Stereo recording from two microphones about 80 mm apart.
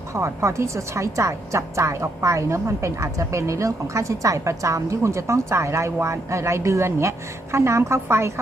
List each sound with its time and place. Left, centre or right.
0.1 s speech: right